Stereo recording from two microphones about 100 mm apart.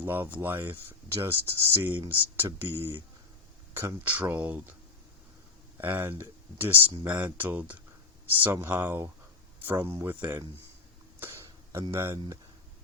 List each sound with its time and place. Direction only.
0.0 s speech: 20° right (ahead or behind)
4.0 s speech: 15° right (ahead or behind)
5.7 s speech: 20° right (ahead or behind)
11.2 s a sound: 25° right (ahead or behind)